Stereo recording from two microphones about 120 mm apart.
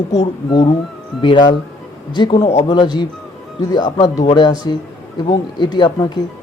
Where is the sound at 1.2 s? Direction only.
40° left (ahead or behind).